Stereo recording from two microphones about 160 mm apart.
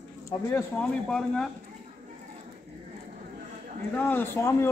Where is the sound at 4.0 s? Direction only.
10° left (ahead or behind).